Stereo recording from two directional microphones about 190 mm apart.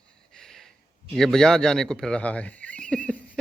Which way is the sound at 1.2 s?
Centre (ahead or behind).